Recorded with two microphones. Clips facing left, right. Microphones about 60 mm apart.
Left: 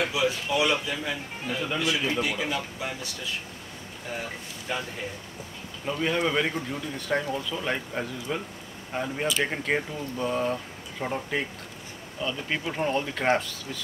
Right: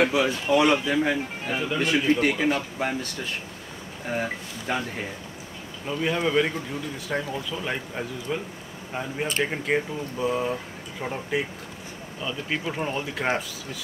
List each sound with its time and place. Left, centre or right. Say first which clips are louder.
0.1 s speech: right 4 dB; right
4.7 s speech: right 4 dB; right
5.9 s speech: right 1 dB; centre